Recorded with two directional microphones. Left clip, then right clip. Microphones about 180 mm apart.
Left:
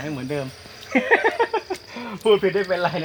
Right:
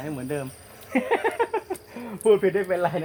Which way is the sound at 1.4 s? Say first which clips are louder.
Left 3 dB; 5° left (ahead or behind).